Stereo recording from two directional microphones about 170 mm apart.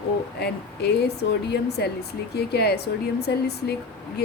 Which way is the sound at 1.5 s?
75° left (ahead or behind).